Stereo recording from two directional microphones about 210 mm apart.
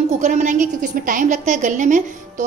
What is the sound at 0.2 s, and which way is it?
A woman's voice, 35° right (ahead or behind).